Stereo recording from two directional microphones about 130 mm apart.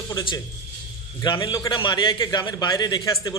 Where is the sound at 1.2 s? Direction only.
35° left (ahead or behind).